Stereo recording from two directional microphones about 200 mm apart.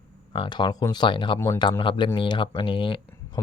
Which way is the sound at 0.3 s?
25° left (ahead or behind).